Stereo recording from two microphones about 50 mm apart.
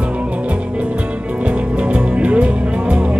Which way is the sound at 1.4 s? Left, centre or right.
Right.